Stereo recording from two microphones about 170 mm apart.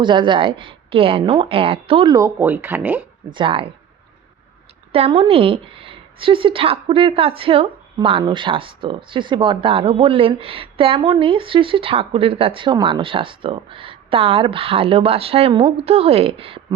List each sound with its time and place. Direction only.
0.0 s speech: 30° right (ahead or behind)
2.1 s speech: 15° right (ahead or behind)
3.3 s speech: 30° right (ahead or behind)
4.9 s speech: 35° right (ahead or behind)